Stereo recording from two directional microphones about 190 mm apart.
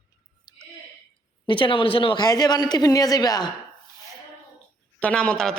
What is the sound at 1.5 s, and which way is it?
Speech, 25° left (ahead or behind).